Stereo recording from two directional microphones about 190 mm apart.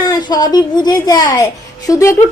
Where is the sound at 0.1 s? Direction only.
20° left (ahead or behind).